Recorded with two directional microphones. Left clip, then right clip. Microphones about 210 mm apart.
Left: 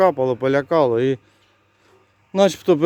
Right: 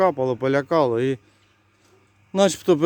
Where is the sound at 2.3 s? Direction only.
5° right (ahead or behind).